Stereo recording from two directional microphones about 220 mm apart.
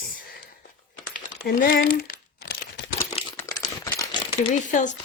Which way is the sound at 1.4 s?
45° left (ahead or behind).